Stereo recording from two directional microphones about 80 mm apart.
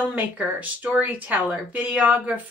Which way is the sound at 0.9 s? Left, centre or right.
Centre.